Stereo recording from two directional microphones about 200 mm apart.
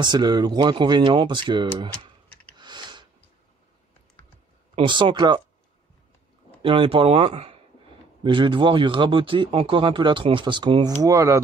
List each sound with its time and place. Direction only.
0.0 s speech: 20° right (ahead or behind)
2.5 s a sound: 20° right (ahead or behind)
4.2 s computer keyboard: 10° left (ahead or behind)
4.7 s speech: 25° right (ahead or behind)
6.6 s speech: 25° right (ahead or behind)